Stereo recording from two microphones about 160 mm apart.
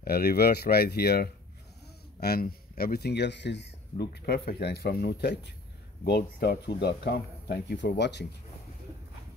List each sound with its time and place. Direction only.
0.0 s speech: 75° left (ahead or behind)
2.1 s speech: 75° left (ahead or behind); by 8.3 s 90° left